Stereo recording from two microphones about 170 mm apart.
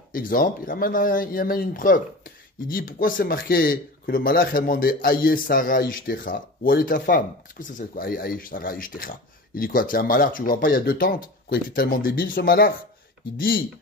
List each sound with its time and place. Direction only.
0.1 s speech: 55° left (ahead or behind)